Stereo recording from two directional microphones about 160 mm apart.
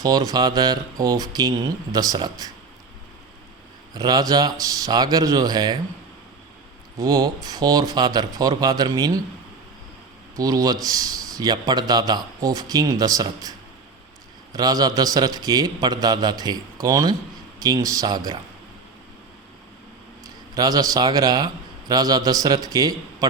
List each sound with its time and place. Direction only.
0.0 s a man's voice: 25° right (ahead or behind)
3.9 s a man's voice: 25° right (ahead or behind)
7.0 s a man's voice: 20° right (ahead or behind)
10.3 s a man's voice: 25° right (ahead or behind)
14.5 s a man's voice: 25° right (ahead or behind)
20.6 s a man's voice: 25° right (ahead or behind)